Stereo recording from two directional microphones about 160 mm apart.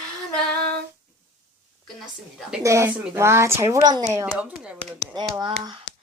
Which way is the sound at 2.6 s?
20° right (ahead or behind).